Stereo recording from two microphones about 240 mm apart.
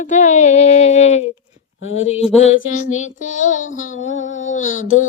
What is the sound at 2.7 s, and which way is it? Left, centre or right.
Female singing, left.